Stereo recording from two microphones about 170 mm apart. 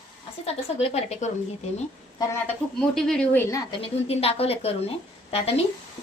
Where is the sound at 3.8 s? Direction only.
35° left (ahead or behind).